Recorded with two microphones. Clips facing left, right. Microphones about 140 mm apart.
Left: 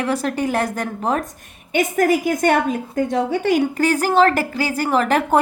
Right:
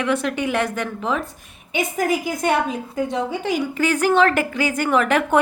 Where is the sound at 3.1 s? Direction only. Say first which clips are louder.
Left 7 dB; 50° left (ahead or behind).